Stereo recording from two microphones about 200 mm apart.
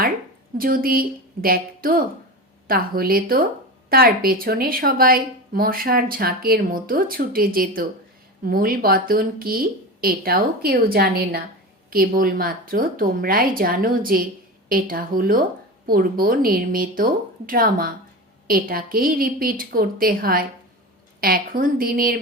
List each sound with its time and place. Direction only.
0.6 s speech: 45° right (ahead or behind)